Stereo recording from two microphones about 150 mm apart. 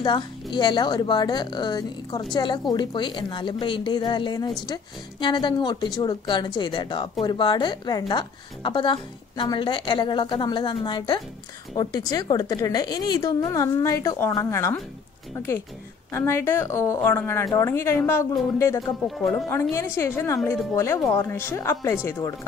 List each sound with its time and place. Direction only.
0.0 s a woman's voice: 30° left (ahead or behind)
16.1 s a woman's voice: 15° left (ahead or behind)
19.0 s speech: centre (ahead or behind)
20.0 s a woman's voice: 20° left (ahead or behind)